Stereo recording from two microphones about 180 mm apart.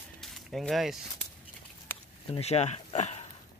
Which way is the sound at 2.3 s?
35° left (ahead or behind).